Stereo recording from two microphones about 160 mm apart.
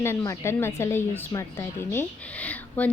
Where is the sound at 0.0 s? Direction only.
15° left (ahead or behind).